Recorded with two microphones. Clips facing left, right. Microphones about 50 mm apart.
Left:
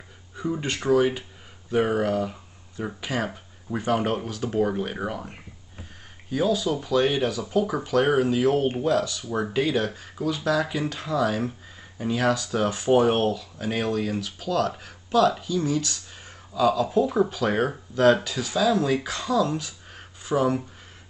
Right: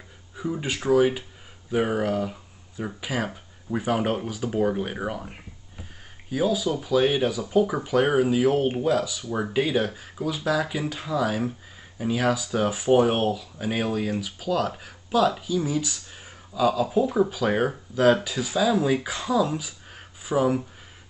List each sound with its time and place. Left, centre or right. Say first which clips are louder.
0.4 s speech: left 1 dB; centre